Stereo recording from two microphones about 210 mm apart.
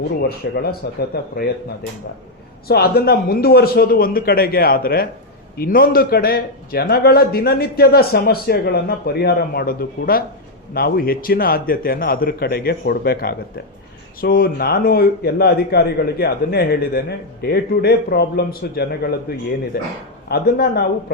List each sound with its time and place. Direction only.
0.2 s a man's voice: 50° left (ahead or behind)
2.6 s a man's voice: 50° left (ahead or behind)
20.2 s a man's voice: 50° left (ahead or behind)